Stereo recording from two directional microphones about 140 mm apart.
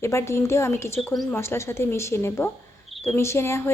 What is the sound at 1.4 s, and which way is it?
A woman's voice, 20° left (ahead or behind).